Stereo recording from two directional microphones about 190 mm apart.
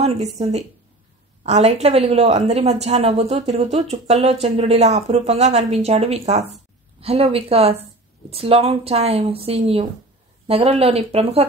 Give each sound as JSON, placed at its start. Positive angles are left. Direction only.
{"t": 0.0, "sound": "a woman's voice", "side_deg": -35}